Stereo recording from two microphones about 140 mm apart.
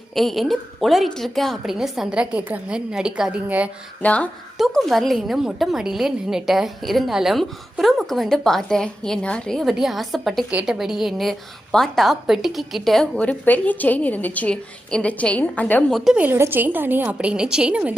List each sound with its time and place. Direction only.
0.1 s a woman's voice: centre (ahead or behind)
4.0 s a woman's voice: 10° left (ahead or behind)
16.0 s a woman's voice: 5° right (ahead or behind)